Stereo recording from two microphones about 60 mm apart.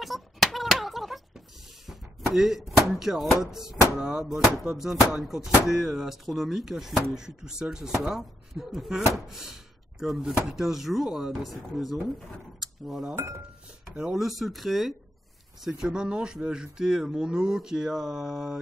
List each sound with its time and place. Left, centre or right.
0.0 s a sound: centre
3.9 s speech: centre
13.1 s speech: right
13.9 s speech: centre
14.2 s speech: centre